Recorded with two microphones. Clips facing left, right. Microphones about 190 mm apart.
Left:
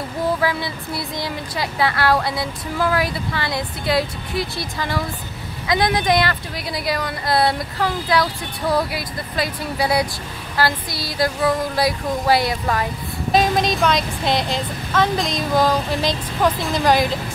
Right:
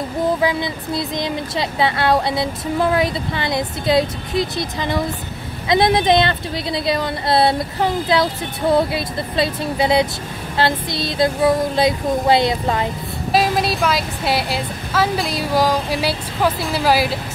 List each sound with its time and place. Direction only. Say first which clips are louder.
0.4 s speech: right 3 dB; 20° right (ahead or behind)
13.3 s a woman's voice: even; 5° right (ahead or behind)